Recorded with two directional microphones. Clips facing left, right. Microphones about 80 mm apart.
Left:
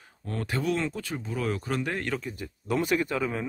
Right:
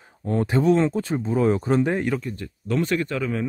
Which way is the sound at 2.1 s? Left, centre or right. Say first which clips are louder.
Right 6 dB; centre.